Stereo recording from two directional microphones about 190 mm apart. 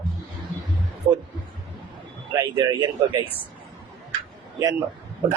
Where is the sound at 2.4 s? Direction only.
25° right (ahead or behind).